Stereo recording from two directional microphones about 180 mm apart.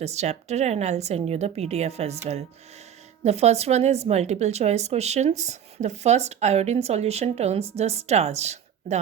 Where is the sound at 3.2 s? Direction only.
35° right (ahead or behind).